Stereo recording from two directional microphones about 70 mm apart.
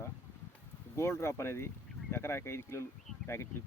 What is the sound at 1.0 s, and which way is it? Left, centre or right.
Speech, left.